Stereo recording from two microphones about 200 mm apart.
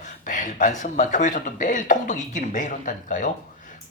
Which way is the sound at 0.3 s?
40° left (ahead or behind).